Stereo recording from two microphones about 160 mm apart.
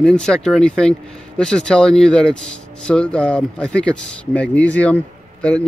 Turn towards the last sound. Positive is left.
turn(degrees=5)  # may be behind; listen again after turning